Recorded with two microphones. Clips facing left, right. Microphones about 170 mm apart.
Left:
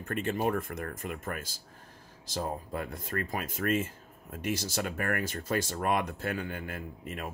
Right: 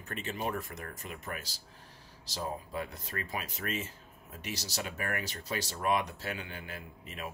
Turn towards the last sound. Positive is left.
turn(degrees=50)  # may be behind; listen again after turning